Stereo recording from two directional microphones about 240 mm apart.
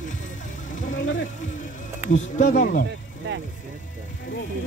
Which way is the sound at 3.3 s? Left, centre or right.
Right.